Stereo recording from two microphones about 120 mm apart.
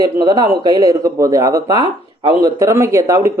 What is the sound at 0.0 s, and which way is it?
Speech, 35° right (ahead or behind).